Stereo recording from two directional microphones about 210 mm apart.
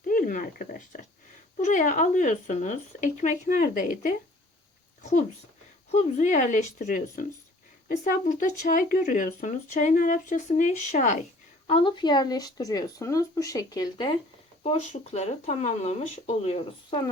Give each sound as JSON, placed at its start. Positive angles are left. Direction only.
{"t": 0.0, "sound": "speech", "side_deg": 40}
{"t": 5.9, "sound": "speech", "side_deg": 35}
{"t": 11.7, "sound": "speech", "side_deg": 25}